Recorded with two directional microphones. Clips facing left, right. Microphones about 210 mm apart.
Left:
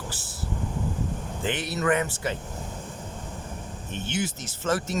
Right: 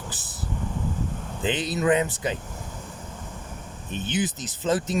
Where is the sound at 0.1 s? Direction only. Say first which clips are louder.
Even; 20° right (ahead or behind).